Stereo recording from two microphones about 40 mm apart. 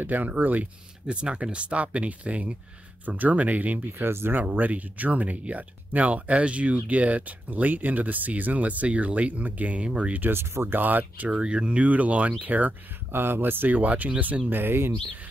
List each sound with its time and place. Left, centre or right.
0.0 s speech: right
1.0 s speech: right
4.0 s speech: right
4.4 s speech: right
10.3 s speech: right
10.8 s speech: right
11.2 s speech: right
13.1 s speech: right
13.7 s speech: right
14.5 s speech: right